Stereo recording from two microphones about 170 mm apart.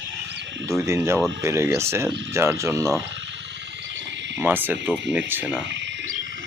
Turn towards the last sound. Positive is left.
turn(degrees=-90)